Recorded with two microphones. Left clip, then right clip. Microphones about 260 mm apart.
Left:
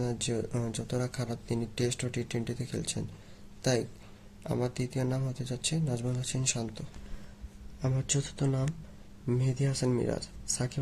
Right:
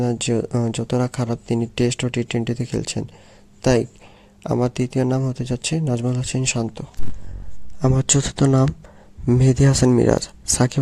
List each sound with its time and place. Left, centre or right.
0.0 s speech: right